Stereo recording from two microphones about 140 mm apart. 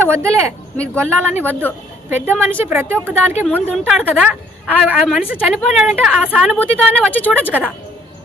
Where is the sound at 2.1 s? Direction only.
15° right (ahead or behind).